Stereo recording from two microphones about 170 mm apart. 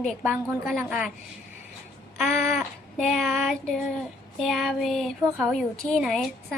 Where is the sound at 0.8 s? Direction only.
5° right (ahead or behind).